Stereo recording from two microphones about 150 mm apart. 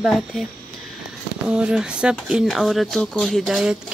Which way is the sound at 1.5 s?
5° right (ahead or behind).